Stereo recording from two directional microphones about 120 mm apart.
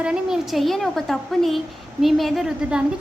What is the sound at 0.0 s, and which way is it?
A woman's voice, 5° right (ahead or behind).